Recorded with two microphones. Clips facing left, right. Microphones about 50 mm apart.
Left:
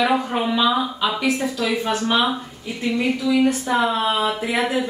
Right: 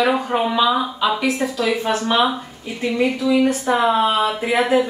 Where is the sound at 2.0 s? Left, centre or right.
Centre.